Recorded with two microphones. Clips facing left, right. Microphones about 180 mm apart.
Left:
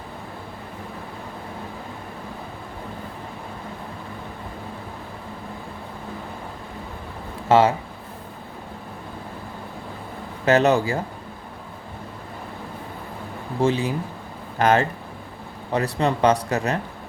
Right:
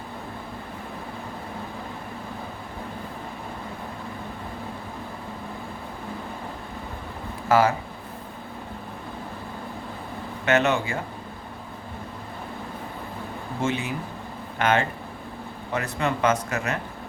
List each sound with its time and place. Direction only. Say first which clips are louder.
7.4 s speech: left 3 dB; 25° left (ahead or behind)
10.4 s a man's voice: left 5 dB; 35° left (ahead or behind)
13.6 s a man's voice: left 6 dB; 35° left (ahead or behind)